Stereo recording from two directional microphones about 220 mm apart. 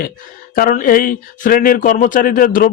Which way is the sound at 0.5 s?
40° left (ahead or behind).